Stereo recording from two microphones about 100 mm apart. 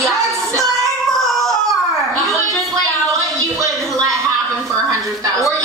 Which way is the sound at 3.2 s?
35° right (ahead or behind).